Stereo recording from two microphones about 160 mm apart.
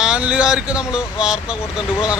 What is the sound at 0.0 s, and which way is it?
Speech, 5° right (ahead or behind).